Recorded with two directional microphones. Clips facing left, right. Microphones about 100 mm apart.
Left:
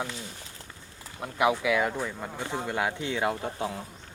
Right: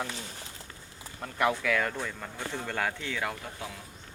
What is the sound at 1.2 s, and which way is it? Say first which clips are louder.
Speech: left 3 dB; 15° left (ahead or behind).